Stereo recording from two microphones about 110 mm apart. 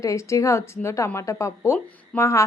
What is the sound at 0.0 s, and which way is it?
Speech, 30° left (ahead or behind).